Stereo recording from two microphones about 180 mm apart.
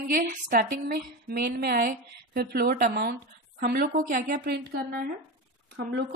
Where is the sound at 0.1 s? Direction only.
50° right (ahead or behind).